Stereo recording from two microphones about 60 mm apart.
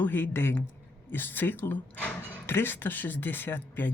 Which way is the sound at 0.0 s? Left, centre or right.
Left.